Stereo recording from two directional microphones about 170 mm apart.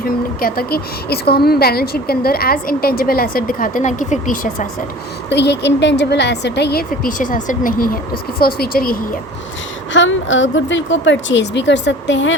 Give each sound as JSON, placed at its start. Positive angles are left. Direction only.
{"t": 0.3, "sound": "a woman's voice", "side_deg": 60}
{"t": 5.3, "sound": "a woman's voice", "side_deg": 90}
{"t": 9.9, "sound": "speech", "side_deg": 90}